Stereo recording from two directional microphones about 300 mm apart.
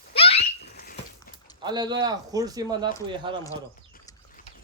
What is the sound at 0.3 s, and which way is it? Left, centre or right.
Rodents, left.